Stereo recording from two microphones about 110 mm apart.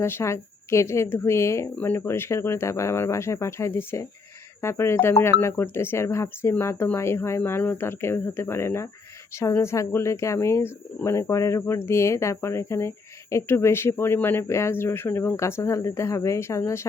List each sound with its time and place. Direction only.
0.0 s a woman's voice: 25° left (ahead or behind)